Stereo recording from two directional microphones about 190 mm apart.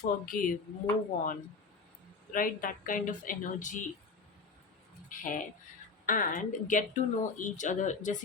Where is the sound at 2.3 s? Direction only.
45° left (ahead or behind).